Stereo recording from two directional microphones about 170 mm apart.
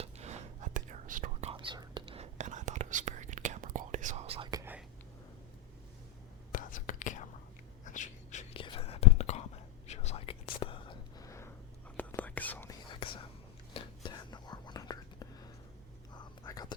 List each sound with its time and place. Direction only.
0.0 s whispering: 40° right (ahead or behind)
1.5 s whispering: 25° right (ahead or behind)
4.5 s whispering: 15° right (ahead or behind)
6.5 s whispering: 50° left (ahead or behind)
7.9 s a sound: 45° left (ahead or behind)
8.5 s whispering: 30° left (ahead or behind)
11.3 s a sound: 15° left (ahead or behind)
11.9 s whispering: 10° left (ahead or behind)
12.9 s whispering: 30° left (ahead or behind)